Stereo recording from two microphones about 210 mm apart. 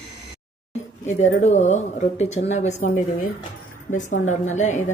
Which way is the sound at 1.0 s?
35° left (ahead or behind).